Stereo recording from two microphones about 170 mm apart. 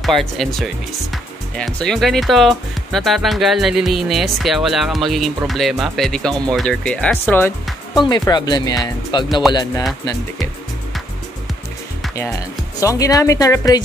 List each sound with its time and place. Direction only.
0.0 s speech: centre (ahead or behind)
8.0 s speech: 25° left (ahead or behind)
12.2 s speech: 20° left (ahead or behind)